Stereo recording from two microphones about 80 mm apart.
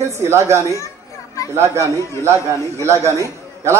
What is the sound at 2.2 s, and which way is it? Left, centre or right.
A man's voice, right.